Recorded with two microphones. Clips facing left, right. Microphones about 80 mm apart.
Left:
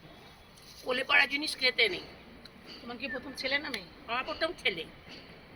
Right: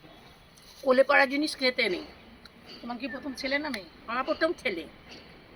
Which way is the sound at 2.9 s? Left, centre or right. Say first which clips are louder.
Right 4 dB; centre.